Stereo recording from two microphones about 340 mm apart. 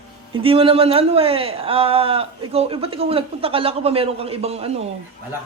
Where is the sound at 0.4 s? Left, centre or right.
Centre.